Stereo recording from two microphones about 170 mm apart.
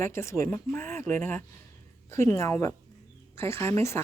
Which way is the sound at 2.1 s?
15° left (ahead or behind).